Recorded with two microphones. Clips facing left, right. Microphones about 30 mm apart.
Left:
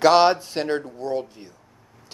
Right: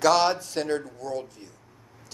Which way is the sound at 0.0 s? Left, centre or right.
Left.